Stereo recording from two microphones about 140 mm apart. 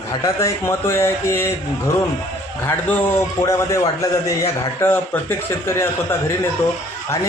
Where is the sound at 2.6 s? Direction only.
15° left (ahead or behind).